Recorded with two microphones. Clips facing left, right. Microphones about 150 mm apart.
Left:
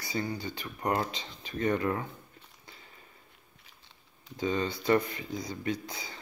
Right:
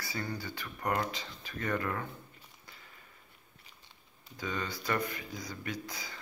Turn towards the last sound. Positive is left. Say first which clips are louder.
# left 5 dB
turn(degrees=25)  # may be behind; listen again after turning